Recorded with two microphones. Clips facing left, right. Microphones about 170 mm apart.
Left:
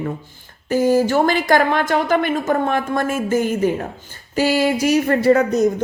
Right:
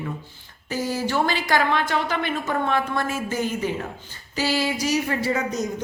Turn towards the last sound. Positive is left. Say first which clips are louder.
# left 10 dB
turn(degrees=55)  # may be behind; listen again after turning